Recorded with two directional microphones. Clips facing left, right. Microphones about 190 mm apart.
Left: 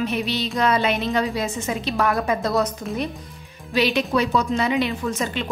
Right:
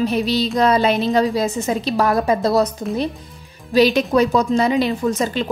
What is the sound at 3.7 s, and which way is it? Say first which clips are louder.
A woman's voice: right 6 dB; 40° right (ahead or behind).